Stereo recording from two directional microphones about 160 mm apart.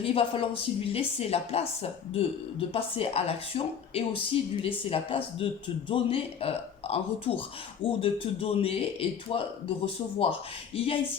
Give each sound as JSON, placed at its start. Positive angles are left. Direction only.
{"t": 0.0, "sound": "a woman's voice", "side_deg": 35}